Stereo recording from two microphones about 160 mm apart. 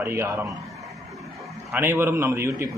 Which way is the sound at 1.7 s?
15° right (ahead or behind).